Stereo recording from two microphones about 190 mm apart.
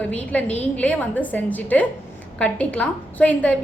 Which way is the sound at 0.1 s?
5° left (ahead or behind).